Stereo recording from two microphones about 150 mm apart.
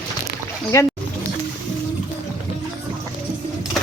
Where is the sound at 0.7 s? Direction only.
20° left (ahead or behind).